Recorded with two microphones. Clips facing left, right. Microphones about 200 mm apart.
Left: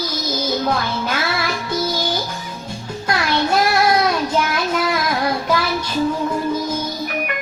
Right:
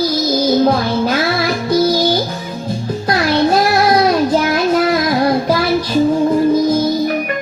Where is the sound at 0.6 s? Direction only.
35° right (ahead or behind).